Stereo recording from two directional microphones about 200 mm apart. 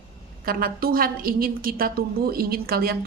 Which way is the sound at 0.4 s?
45° right (ahead or behind).